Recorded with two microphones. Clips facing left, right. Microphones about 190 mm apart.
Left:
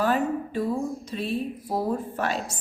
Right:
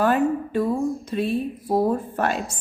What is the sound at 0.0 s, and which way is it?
A woman's voice, 55° right (ahead or behind).